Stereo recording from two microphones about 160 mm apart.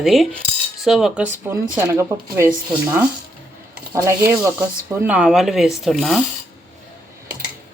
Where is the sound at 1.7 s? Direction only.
15° right (ahead or behind).